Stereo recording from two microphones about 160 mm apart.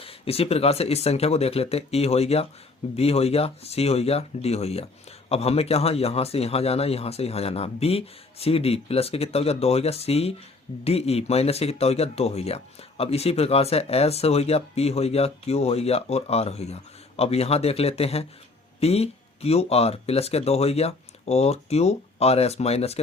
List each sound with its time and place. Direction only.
0.0 s speech: 35° left (ahead or behind)